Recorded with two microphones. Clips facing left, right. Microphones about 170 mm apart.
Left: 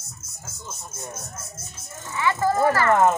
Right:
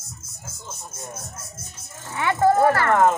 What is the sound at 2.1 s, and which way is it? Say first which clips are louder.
Speech: right 4 dB; 60° right (ahead or behind).